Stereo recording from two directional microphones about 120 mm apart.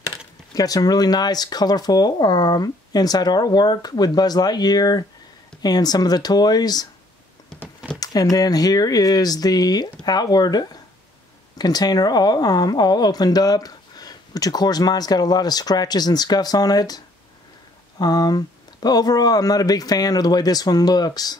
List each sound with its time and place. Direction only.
0.6 s speech: 30° left (ahead or behind)
7.5 s a sound: 15° right (ahead or behind)
8.0 s speech: 30° left (ahead or behind)